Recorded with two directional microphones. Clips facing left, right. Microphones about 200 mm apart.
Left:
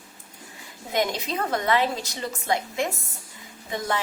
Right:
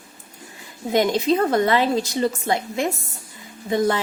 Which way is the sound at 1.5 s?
30° right (ahead or behind).